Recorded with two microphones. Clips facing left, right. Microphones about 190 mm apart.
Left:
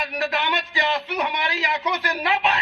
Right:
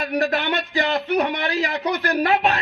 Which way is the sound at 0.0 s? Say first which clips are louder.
Right 4 dB; 40° right (ahead or behind).